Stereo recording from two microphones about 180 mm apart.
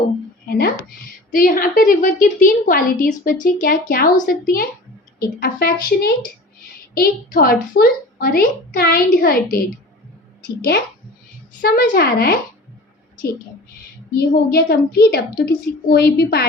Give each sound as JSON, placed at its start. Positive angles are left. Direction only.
{"t": 0.4, "sound": "a sound", "side_deg": 60}
{"t": 1.3, "sound": "a woman's voice", "side_deg": 50}
{"t": 11.6, "sound": "a child's voice", "side_deg": 55}
{"t": 14.2, "sound": "a child's voice", "side_deg": 60}